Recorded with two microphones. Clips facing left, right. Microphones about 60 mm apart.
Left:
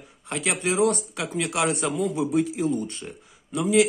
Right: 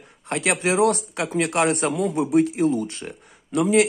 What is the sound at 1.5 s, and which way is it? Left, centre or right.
Speech, right.